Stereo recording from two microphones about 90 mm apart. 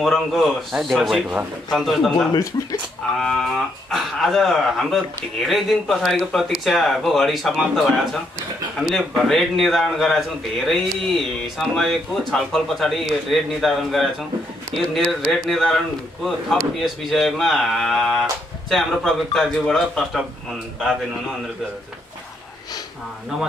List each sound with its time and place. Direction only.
0.0 s speech: 5° left (ahead or behind)
1.1 s speech: 15° right (ahead or behind)
1.7 s speech: centre (ahead or behind)